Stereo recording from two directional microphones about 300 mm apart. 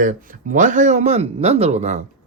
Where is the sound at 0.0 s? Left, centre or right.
Right.